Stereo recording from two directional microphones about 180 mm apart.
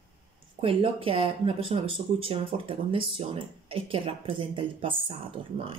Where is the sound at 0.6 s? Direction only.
30° right (ahead or behind).